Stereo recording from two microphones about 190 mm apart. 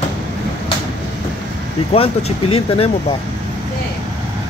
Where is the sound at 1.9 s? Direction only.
30° left (ahead or behind).